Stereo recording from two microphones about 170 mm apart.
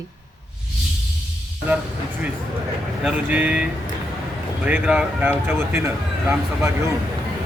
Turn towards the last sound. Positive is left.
turn(degrees=-15)  # may be behind; listen again after turning